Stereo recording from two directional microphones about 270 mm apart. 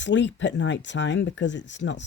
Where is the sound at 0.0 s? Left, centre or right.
Left.